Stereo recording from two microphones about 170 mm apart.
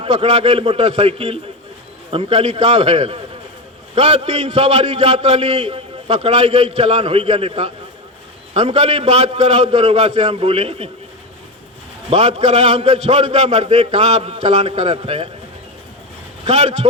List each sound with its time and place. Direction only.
0.0 s a man's voice: 35° right (ahead or behind)
12.1 s a man's voice: 40° right (ahead or behind)
16.5 s a man's voice: 40° right (ahead or behind)